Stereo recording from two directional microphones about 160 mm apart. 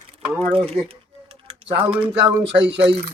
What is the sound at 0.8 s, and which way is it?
Typing, 40° right (ahead or behind).